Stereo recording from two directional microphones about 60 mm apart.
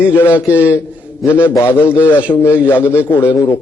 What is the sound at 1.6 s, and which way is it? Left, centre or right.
Speech, left.